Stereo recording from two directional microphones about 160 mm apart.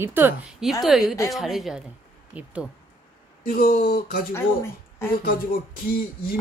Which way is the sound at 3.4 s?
60° left (ahead or behind).